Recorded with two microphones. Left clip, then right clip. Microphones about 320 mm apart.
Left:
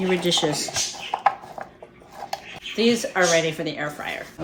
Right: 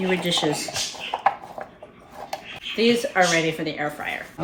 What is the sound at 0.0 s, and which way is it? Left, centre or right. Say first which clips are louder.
Speech: left 1 dB; centre.